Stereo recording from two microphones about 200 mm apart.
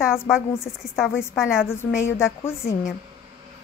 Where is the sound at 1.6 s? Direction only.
10° left (ahead or behind).